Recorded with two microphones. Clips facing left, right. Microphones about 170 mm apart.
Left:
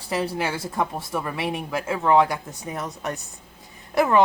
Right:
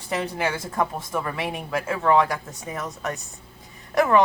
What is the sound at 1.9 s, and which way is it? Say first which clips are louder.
Speech: left 1 dB; 20° left (ahead or behind).